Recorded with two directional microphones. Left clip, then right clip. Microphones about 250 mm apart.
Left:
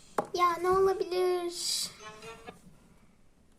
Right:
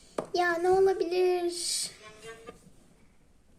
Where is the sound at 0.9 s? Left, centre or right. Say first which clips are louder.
Right 2 dB; centre.